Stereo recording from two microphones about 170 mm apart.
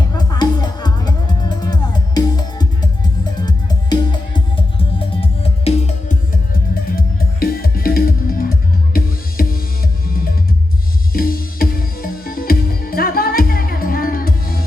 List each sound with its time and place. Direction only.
0.1 s music: 20° left (ahead or behind); by 6.1 s 40° left (ahead or behind)
6.5 s music: 60° left (ahead or behind)